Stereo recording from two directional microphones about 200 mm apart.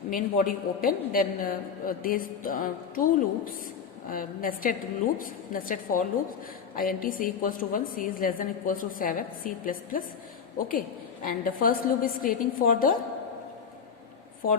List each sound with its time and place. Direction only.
0.1 s a man's voice: 45° left (ahead or behind)